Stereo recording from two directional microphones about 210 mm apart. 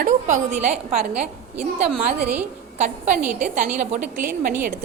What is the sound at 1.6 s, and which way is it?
Speech, 5° right (ahead or behind).